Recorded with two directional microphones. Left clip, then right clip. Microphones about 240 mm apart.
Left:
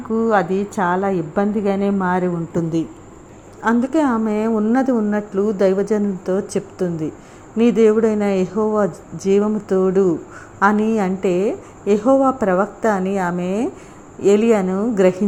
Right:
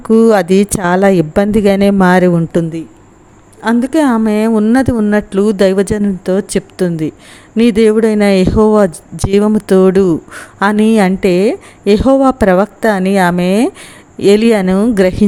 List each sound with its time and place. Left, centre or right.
0.1 s a woman's voice: right
7.5 s speech: right
8.9 s a woman's voice: right
9.7 s speech: right